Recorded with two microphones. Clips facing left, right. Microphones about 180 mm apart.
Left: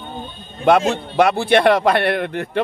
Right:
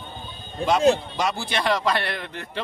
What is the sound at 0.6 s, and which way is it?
Speech, 35° right (ahead or behind).